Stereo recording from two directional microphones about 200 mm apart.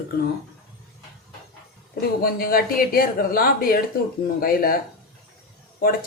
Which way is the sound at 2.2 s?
45° left (ahead or behind).